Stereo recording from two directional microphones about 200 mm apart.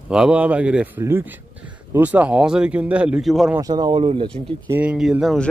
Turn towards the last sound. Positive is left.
turn(degrees=0)  # may be behind; listen again after turning